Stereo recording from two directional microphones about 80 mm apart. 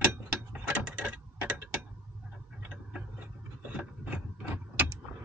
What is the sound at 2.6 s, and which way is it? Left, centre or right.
Tick-tock, centre.